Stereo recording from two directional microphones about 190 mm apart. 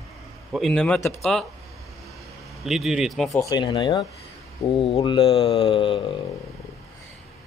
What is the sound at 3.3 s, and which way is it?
Speech, 20° left (ahead or behind).